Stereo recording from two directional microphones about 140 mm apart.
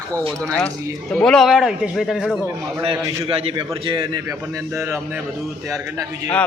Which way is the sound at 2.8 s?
40° right (ahead or behind).